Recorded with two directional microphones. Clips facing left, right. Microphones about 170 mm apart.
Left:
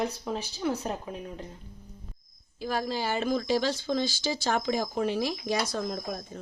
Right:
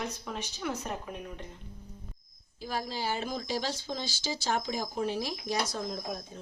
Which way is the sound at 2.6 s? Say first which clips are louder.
Left 4 dB; 60° left (ahead or behind).